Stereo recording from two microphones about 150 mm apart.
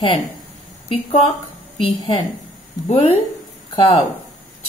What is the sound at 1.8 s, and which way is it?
Speech, 35° left (ahead or behind).